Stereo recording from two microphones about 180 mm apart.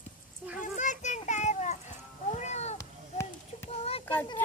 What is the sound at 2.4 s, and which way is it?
Cat, 40° left (ahead or behind).